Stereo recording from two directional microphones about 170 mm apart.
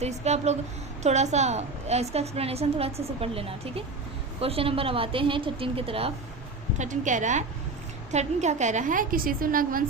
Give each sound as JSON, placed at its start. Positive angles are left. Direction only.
{"t": 0.0, "sound": "a woman's voice", "side_deg": -40}
{"t": 6.7, "sound": "a woman's voice", "side_deg": -45}